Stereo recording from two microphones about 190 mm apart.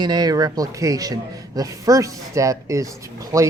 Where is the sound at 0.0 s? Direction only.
20° right (ahead or behind).